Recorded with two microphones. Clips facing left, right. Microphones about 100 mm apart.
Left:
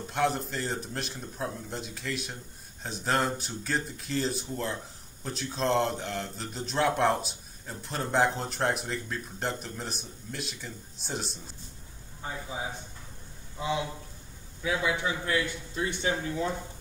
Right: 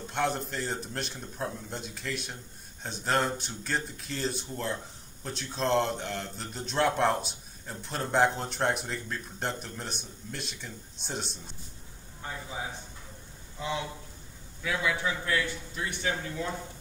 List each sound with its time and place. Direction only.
0.0 s a man's voice: centre (ahead or behind)
13.6 s a man's voice: 15° left (ahead or behind)